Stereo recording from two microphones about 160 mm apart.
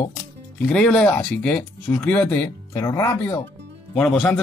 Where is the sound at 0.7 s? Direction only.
5° left (ahead or behind).